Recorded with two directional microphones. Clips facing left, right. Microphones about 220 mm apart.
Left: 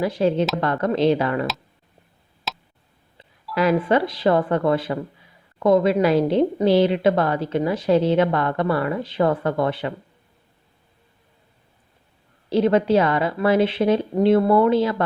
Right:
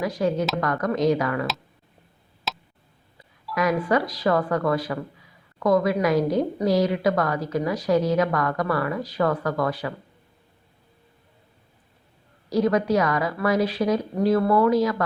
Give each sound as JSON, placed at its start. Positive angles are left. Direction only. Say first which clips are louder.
{"t": 0.0, "sound": "speech", "louder": "left 4 dB", "side_deg": 30}
{"t": 2.5, "sound": "tick", "louder": "even", "side_deg": 0}
{"t": 3.5, "sound": "speech", "louder": "left 3 dB", "side_deg": 30}
{"t": 12.5, "sound": "speech", "louder": "left 3 dB", "side_deg": 25}